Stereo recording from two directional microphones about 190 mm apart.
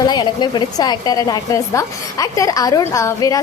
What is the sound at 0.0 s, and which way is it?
A woman's voice, 25° left (ahead or behind).